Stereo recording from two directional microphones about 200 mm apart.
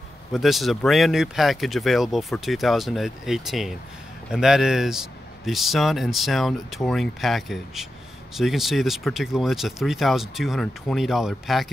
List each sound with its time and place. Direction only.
0.3 s speech: centre (ahead or behind)